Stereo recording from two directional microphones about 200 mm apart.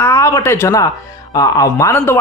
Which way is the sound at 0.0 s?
15° left (ahead or behind).